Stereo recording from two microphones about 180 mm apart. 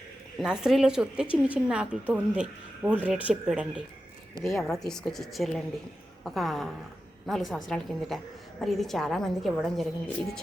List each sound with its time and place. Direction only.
0.3 s a woman's voice: 5° right (ahead or behind)